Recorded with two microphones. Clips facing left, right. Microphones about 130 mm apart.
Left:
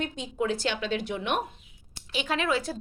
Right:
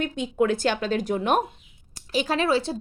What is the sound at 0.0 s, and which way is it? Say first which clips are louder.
A woman's voice: right 6 dB; 55° right (ahead or behind).